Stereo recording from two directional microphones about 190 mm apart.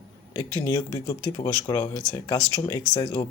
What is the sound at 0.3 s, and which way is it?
Speech, 20° left (ahead or behind).